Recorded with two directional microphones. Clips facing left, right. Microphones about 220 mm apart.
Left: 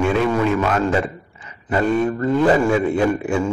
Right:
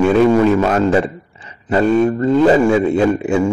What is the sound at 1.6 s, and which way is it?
A man's voice, 25° right (ahead or behind).